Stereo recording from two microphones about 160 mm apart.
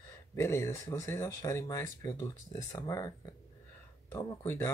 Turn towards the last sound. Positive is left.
turn(degrees=15)  # may be behind; listen again after turning